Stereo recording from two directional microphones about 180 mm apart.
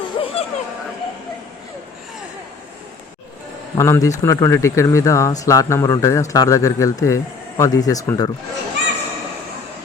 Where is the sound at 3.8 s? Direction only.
15° left (ahead or behind).